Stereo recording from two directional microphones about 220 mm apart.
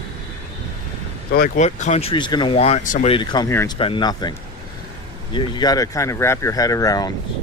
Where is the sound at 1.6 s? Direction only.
35° left (ahead or behind).